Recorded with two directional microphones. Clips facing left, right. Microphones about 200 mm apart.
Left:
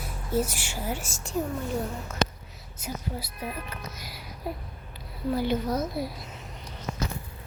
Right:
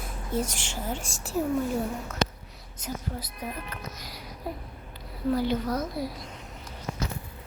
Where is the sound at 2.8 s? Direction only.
10° left (ahead or behind).